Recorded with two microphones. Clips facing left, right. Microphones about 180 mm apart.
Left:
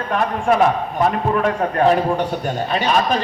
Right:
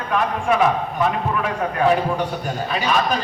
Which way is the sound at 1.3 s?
40° left (ahead or behind).